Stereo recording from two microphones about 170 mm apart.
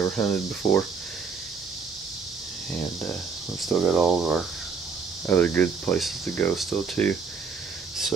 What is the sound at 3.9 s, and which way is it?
Speech, centre (ahead or behind).